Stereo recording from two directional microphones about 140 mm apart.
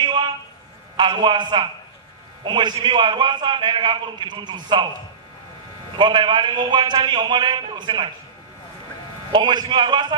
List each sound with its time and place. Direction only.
0.9 s a man's voice: 35° right (ahead or behind)
5.9 s a man's voice: 35° right (ahead or behind)
9.3 s a man's voice: 30° right (ahead or behind)